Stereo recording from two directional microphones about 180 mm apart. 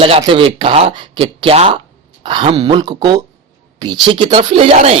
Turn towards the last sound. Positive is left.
turn(degrees=-35)  # may be behind; listen again after turning